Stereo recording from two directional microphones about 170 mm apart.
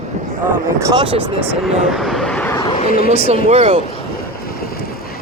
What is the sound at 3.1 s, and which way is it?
Speech, 35° right (ahead or behind).